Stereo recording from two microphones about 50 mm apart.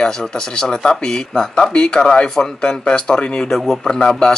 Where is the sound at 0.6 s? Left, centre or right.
Centre.